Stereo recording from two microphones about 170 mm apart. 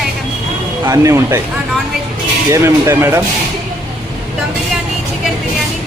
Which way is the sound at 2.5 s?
15° right (ahead or behind).